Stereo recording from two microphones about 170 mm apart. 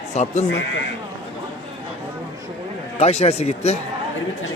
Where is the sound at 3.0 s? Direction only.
40° left (ahead or behind).